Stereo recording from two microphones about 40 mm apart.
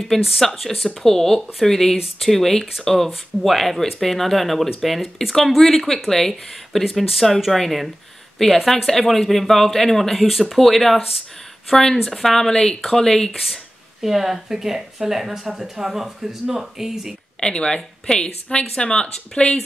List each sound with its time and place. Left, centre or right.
0.4 s speech: centre
6.8 s speech: centre
11.7 s speech: centre
13.3 s speech: centre
17.4 s speech: left